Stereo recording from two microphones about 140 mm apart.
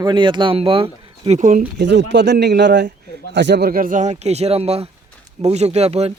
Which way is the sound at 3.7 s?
80° right.